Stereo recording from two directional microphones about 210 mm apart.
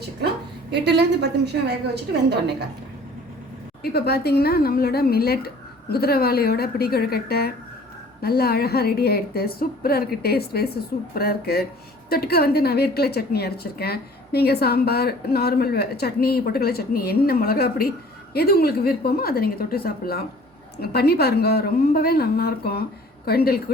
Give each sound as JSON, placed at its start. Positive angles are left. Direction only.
{"t": 0.2, "sound": "a sound", "side_deg": -50}
{"t": 0.7, "sound": "a woman's voice", "side_deg": -55}
{"t": 3.9, "sound": "a woman's voice", "side_deg": 50}